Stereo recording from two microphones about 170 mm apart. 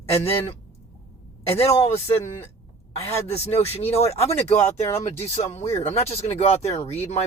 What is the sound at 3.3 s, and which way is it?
Speech, 40° left (ahead or behind).